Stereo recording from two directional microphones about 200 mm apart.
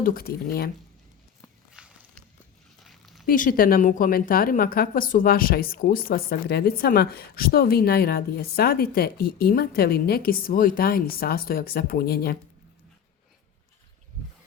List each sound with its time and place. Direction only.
0.0 s a woman's voice: 45° left (ahead or behind)
1.7 s walk: 5° right (ahead or behind)
2.8 s a sound: centre (ahead or behind)
3.2 s a woman's voice: 45° left (ahead or behind)